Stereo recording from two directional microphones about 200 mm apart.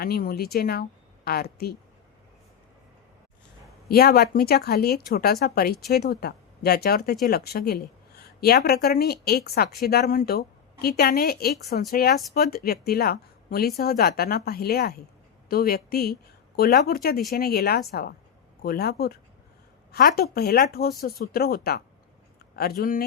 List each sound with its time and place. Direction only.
0.0 s speech: 50° left (ahead or behind)
3.8 s speech: 50° left (ahead or behind)